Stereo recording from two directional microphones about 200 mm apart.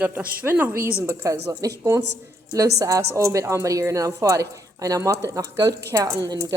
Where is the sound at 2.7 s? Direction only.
15° right (ahead or behind).